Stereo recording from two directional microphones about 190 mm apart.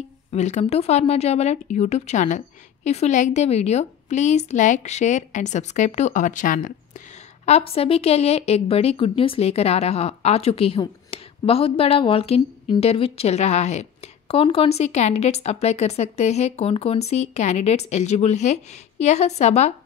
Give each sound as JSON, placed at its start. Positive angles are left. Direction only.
{"t": 0.3, "sound": "a woman's voice", "side_deg": 35}
{"t": 7.4, "sound": "a woman's voice", "side_deg": 35}